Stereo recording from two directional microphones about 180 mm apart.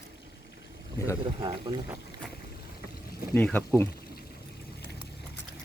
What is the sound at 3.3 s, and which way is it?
Speech, 10° left (ahead or behind).